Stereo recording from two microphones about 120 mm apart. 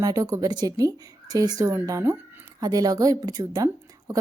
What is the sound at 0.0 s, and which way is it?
A woman's voice, 30° right (ahead or behind).